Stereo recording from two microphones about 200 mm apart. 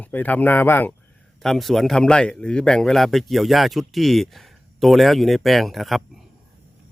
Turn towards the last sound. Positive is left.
turn(degrees=0)  # may be behind; listen again after turning